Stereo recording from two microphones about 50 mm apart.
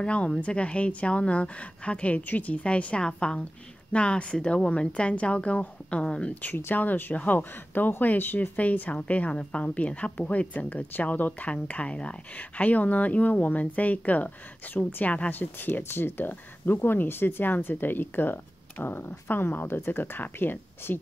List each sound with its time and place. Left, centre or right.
0.0 s a woman's voice: left
6.7 s speech: left